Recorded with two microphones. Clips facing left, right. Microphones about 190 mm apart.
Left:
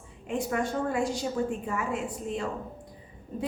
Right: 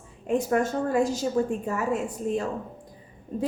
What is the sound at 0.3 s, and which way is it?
A woman's voice, 40° right (ahead or behind).